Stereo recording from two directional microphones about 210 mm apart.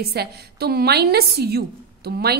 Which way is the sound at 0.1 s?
50° right (ahead or behind).